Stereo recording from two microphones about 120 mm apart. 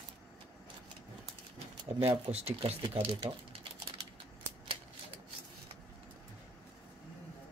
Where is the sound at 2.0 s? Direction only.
55° right (ahead or behind).